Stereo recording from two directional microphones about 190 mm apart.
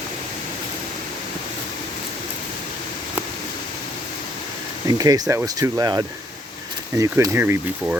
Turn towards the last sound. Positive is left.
turn(degrees=-10)  # may be behind; listen again after turning